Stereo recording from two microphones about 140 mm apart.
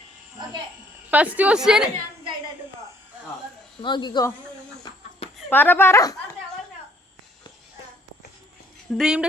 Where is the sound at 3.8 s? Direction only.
35° left (ahead or behind).